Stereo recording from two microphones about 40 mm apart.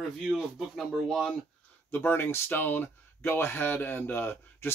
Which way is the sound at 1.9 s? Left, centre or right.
Left.